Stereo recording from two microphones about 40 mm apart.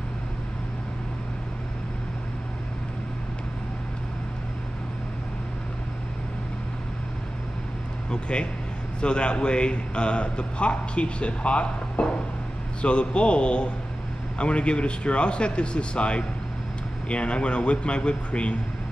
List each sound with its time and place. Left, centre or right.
8.1 s a man's voice: left